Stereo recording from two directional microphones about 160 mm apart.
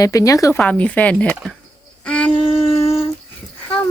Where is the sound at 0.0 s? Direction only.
20° left (ahead or behind).